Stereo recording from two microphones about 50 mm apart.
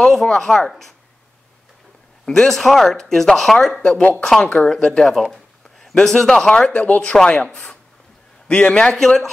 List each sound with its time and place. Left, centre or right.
0.1 s speech: centre
2.2 s speech: centre
3.8 s speech: left
4.2 s speech: centre
5.0 s a sound: centre
5.9 s speech: centre
6.7 s speech: left
8.9 s speech: centre